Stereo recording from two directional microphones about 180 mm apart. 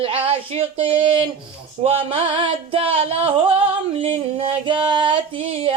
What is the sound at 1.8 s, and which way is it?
Music, 30° right (ahead or behind).